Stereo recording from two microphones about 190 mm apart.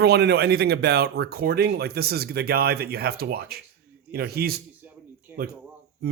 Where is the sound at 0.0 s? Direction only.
60° right (ahead or behind).